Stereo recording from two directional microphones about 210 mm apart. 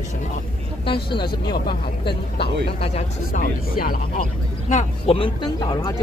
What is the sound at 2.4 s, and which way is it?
Speech, 30° left (ahead or behind).